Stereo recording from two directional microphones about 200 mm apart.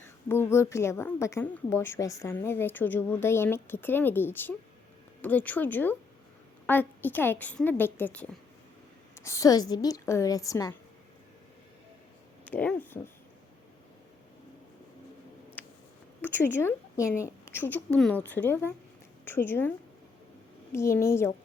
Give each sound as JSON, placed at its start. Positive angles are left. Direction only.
{"t": 0.3, "sound": "a woman's voice", "side_deg": 10}
{"t": 12.5, "sound": "a woman's voice", "side_deg": 5}
{"t": 15.6, "sound": "a sound", "side_deg": 10}
{"t": 16.2, "sound": "a woman's voice", "side_deg": 10}
{"t": 20.7, "sound": "a woman's voice", "side_deg": 15}